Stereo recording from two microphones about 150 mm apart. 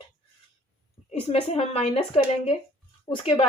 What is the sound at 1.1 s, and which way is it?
Speech, 40° left (ahead or behind).